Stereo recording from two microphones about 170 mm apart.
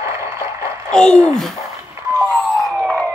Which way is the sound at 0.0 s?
15° right (ahead or behind).